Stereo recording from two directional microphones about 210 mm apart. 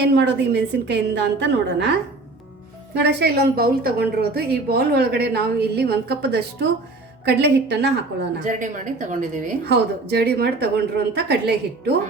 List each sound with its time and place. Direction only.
0.1 s a woman's voice: 55° right (ahead or behind)
3.0 s a woman's voice: 50° right (ahead or behind)
8.4 s a woman's voice: 35° right (ahead or behind)
9.6 s a woman's voice: 50° right (ahead or behind)